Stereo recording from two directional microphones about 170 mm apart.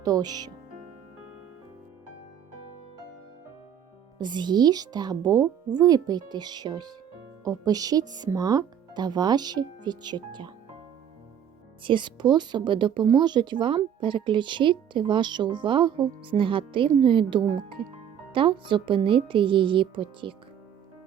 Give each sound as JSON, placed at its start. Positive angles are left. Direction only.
{"t": 0.0, "sound": "speech", "side_deg": -20}
{"t": 4.2, "sound": "speech", "side_deg": -25}
{"t": 11.8, "sound": "speech", "side_deg": -30}